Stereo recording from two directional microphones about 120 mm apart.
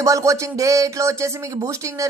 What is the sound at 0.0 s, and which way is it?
Speech, 25° right (ahead or behind).